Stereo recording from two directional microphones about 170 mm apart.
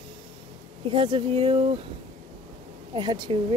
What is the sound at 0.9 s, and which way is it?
Speech, 30° right (ahead or behind).